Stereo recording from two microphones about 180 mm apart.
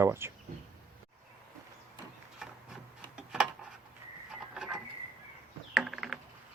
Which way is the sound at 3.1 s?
5° right (ahead or behind).